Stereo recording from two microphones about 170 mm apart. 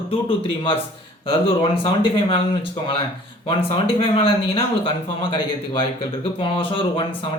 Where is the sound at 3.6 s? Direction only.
30° left (ahead or behind).